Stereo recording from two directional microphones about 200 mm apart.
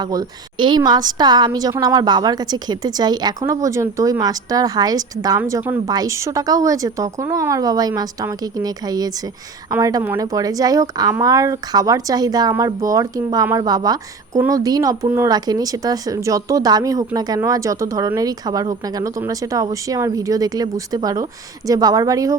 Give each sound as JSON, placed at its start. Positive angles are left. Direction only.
{"t": 0.0, "sound": "a woman's voice", "side_deg": -20}